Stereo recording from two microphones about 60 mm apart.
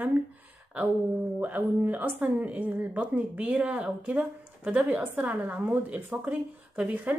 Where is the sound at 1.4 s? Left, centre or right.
Right.